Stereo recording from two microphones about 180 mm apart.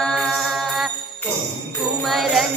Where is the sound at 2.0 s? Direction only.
Centre (ahead or behind).